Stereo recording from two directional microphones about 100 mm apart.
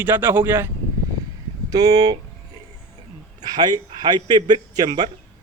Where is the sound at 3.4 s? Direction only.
45° right (ahead or behind).